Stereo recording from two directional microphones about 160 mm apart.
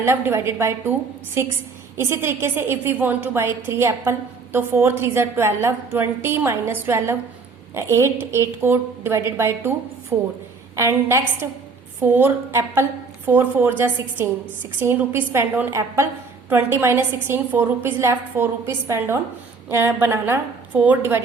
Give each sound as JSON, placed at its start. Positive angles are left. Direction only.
{"t": 0.0, "sound": "a woman's voice", "side_deg": -15}